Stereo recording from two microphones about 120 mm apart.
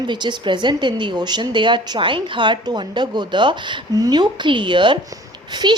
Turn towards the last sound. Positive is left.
turn(degrees=-35)  # may be behind; listen again after turning